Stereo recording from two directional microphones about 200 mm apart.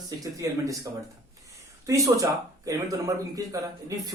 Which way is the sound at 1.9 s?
15° right (ahead or behind).